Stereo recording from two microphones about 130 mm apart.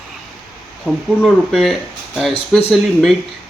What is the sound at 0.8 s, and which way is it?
Speech, centre (ahead or behind).